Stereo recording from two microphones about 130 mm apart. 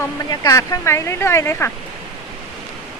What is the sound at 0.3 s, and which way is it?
Speech, 30° left (ahead or behind).